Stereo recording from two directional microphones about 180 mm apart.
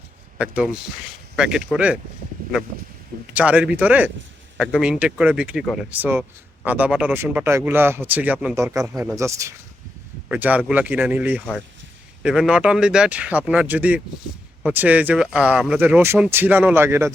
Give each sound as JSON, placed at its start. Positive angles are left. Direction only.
{"t": 0.3, "sound": "speech", "side_deg": -5}
{"t": 3.3, "sound": "speech", "side_deg": -5}
{"t": 8.5, "sound": "speech", "side_deg": -15}